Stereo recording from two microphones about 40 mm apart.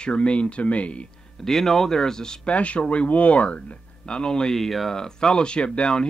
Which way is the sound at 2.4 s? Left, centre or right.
Left.